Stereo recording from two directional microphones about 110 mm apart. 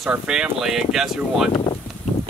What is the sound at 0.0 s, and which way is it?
Speech, 5° right (ahead or behind).